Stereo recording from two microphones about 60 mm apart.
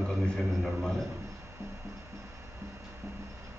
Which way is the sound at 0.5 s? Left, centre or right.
Centre.